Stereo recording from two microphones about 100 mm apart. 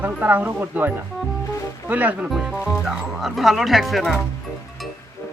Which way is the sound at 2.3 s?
5° right (ahead or behind).